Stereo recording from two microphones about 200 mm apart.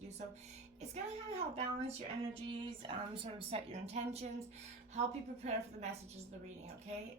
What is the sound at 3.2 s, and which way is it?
A woman's voice, 30° right (ahead or behind).